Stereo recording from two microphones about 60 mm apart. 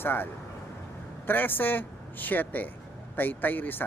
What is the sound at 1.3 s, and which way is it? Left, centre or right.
Speech, left.